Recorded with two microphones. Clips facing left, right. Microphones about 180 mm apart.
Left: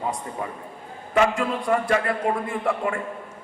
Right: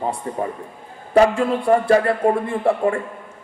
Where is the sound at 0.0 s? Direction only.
35° right (ahead or behind).